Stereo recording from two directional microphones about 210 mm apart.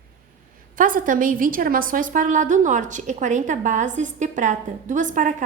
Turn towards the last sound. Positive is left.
turn(degrees=-35)  # may be behind; listen again after turning